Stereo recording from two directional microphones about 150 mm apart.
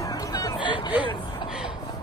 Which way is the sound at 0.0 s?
25° left (ahead or behind).